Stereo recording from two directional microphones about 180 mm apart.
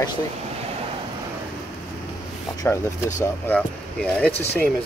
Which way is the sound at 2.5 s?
15° left (ahead or behind).